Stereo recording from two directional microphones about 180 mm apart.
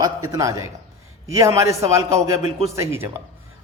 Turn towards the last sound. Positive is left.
turn(degrees=-15)  # may be behind; listen again after turning